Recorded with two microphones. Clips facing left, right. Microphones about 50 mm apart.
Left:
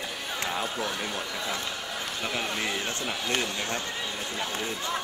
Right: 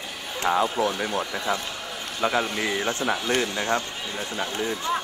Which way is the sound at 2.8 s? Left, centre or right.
Right.